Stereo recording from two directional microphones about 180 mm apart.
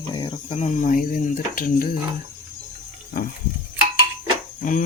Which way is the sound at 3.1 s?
50° left (ahead or behind).